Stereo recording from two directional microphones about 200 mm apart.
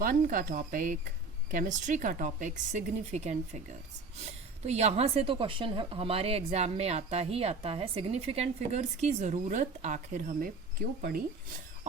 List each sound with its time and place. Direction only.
0.0 s a woman's voice: 45° right (ahead or behind)